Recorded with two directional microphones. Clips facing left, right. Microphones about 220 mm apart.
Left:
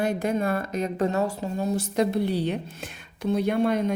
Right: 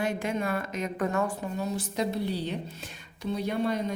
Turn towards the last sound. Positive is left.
turn(degrees=55)  # may be behind; listen again after turning